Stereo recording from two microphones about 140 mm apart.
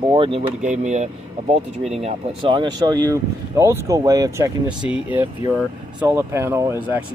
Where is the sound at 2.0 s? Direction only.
40° right (ahead or behind); by 4.5 s 25° right (ahead or behind).